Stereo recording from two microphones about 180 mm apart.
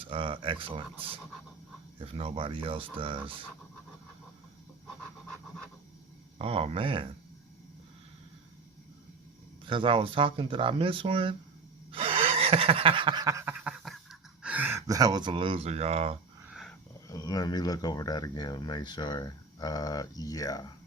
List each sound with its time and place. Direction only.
0.0 s speech: 30° right (ahead or behind)
6.4 s speech: 35° right (ahead or behind)
9.6 s speech: 30° right (ahead or behind)
11.9 s a sound: 30° right (ahead or behind)
16.5 s a sound: centre (ahead or behind)
17.1 s speech: 20° left (ahead or behind)